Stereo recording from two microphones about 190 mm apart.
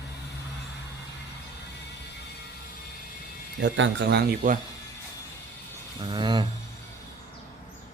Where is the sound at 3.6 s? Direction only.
70° right (ahead or behind); by 4.6 s 50° right (ahead or behind).